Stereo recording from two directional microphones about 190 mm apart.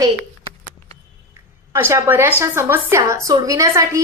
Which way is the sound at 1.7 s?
15° right (ahead or behind).